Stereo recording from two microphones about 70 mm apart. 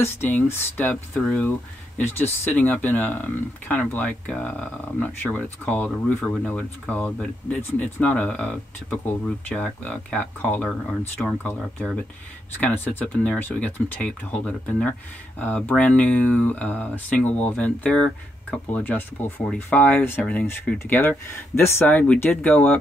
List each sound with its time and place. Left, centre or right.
0.0 s speech: left
2.0 s speech: left
6.0 s speech: centre
12.6 s speech: left
13.0 s speech: centre
14.9 s speech: centre; by 21.8 s left
21.8 s speech: centre